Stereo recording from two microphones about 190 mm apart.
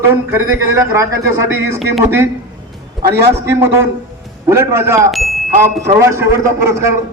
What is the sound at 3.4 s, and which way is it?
A man's voice, 15° right (ahead or behind).